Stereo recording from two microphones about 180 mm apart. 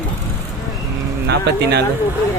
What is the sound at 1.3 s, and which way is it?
Speech, 65° right (ahead or behind).